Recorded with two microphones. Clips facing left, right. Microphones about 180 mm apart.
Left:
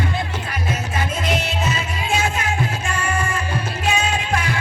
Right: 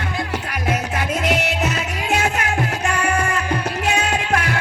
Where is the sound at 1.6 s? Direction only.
65° right (ahead or behind).